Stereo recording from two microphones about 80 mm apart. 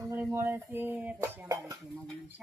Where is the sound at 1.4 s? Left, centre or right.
Right.